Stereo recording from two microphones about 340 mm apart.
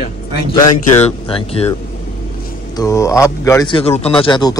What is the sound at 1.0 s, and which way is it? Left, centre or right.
Speech, centre.